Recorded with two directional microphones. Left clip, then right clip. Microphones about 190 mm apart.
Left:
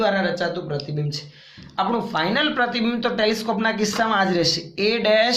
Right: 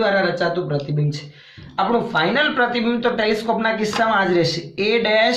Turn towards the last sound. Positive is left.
turn(degrees=35)  # may be behind; listen again after turning